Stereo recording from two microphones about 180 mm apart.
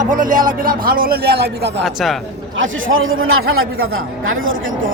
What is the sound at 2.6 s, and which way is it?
Speech, 90° right.